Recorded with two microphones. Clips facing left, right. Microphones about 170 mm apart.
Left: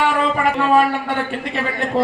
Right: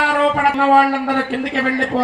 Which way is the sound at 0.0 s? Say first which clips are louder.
Right 2 dB; 90° right.